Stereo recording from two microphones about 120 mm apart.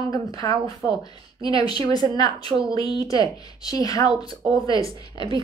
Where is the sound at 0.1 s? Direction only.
30° left (ahead or behind).